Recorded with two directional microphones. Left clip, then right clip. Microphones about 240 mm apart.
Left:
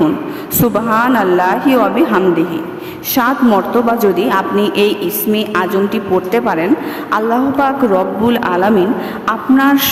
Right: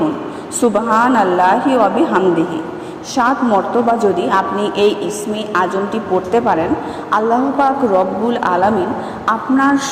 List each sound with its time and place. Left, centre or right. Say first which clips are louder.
0.6 s a woman's voice: even; left